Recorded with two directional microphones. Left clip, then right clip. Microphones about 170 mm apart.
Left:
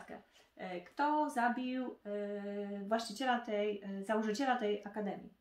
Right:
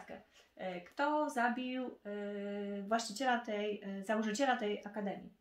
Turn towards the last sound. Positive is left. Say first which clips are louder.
# left 2 dB
turn(degrees=-20)  # may be behind; listen again after turning